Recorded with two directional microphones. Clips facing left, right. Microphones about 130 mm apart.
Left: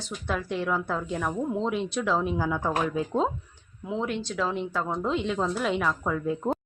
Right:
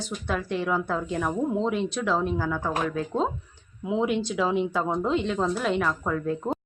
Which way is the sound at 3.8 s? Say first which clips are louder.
Right 5 dB; 10° right (ahead or behind).